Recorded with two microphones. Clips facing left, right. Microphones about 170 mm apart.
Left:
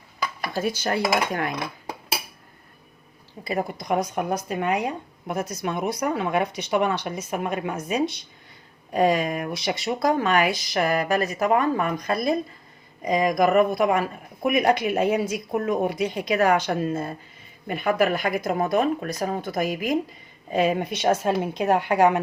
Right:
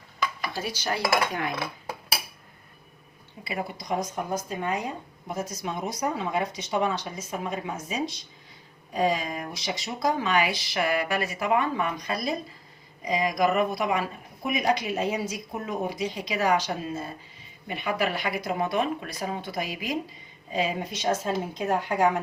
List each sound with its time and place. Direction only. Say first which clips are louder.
0.4 s speech: left 10 dB; 50° left (ahead or behind)
3.4 s speech: left 6 dB; 45° left (ahead or behind); by 22.2 s 70° left (ahead or behind)